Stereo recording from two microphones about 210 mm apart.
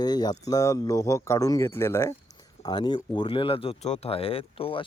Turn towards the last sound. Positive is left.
turn(degrees=25)  # may be behind; listen again after turning